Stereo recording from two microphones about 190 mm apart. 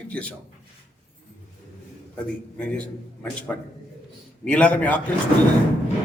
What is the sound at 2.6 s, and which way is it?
A man's voice, 5° left (ahead or behind).